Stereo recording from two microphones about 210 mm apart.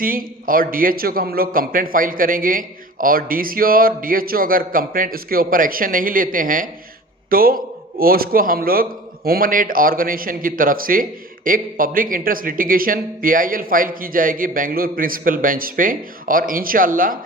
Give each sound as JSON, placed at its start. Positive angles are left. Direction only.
{"t": 0.0, "sound": "a man's voice", "side_deg": -40}